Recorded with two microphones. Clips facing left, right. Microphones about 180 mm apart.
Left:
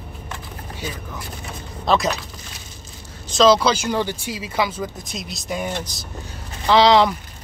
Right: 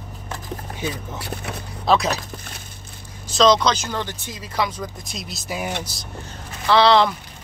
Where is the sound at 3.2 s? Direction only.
Centre (ahead or behind).